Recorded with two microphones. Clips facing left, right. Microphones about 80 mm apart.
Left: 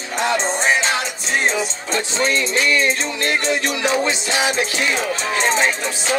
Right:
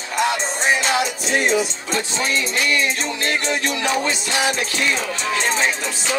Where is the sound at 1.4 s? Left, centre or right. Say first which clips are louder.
Right 1 dB; left.